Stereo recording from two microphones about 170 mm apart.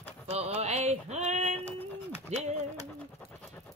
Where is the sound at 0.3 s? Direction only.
40° right (ahead or behind).